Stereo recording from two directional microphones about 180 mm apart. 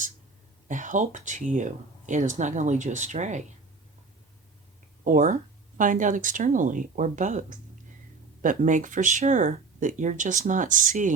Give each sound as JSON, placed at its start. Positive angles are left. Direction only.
{"t": 0.7, "sound": "speech", "side_deg": -45}
{"t": 5.0, "sound": "speech", "side_deg": -45}